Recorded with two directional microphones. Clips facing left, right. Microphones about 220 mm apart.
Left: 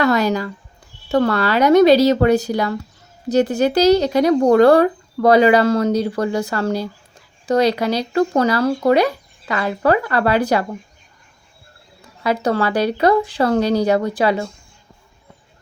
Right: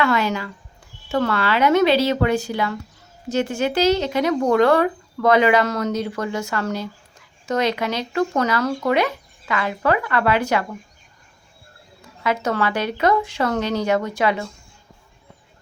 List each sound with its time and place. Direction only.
0.0 s speech: 40° left (ahead or behind)
12.2 s speech: 35° left (ahead or behind)